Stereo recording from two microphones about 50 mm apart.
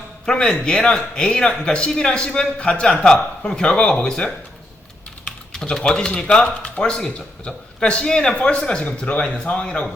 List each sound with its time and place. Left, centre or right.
0.3 s speech: centre
5.5 s speech: centre